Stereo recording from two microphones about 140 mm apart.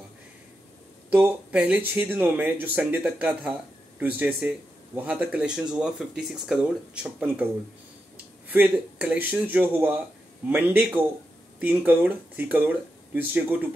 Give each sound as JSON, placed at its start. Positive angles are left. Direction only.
{"t": 1.1, "sound": "speech", "side_deg": -10}
{"t": 8.5, "sound": "speech", "side_deg": -10}